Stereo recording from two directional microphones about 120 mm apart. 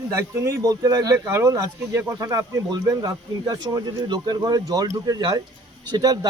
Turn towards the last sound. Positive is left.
turn(degrees=-30)  # may be behind; listen again after turning